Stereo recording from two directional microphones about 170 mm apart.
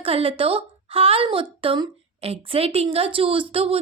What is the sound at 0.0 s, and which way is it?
A woman's voice, 35° right (ahead or behind).